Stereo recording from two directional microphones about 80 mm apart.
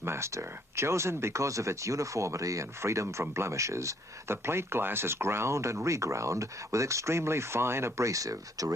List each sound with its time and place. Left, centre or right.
0.0 s speech: right